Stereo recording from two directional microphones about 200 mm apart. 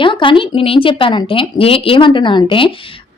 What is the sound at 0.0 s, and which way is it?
A woman's voice, 25° left (ahead or behind).